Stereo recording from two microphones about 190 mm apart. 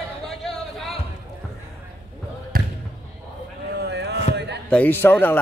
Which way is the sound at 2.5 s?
50° right (ahead or behind).